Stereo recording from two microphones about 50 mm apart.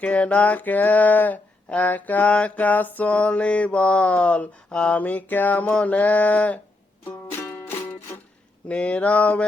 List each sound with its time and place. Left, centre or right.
0.0 s a sound: left
3.1 s mantra: left
4.7 s mantra: centre
4.9 s a sound: left
5.7 s mantra: left
7.3 s music: left
8.6 s mantra: left